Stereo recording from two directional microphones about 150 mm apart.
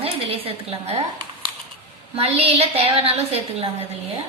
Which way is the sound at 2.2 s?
40° right (ahead or behind).